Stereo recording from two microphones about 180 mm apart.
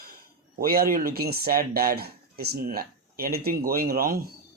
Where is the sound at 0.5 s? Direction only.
55° right (ahead or behind).